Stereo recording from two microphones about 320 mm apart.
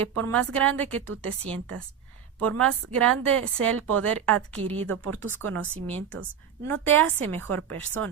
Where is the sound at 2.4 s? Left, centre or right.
Centre.